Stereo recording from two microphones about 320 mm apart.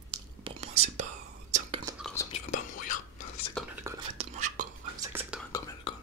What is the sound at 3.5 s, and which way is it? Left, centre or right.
Whispering, centre.